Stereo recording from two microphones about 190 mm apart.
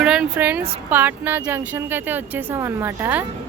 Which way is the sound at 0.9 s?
10° right (ahead or behind).